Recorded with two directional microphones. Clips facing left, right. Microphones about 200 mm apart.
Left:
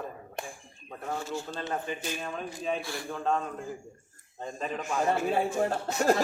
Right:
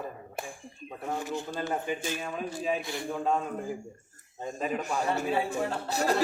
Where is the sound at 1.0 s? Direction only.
15° right (ahead or behind).